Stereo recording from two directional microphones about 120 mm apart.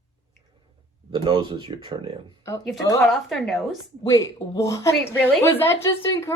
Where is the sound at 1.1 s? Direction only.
40° right (ahead or behind).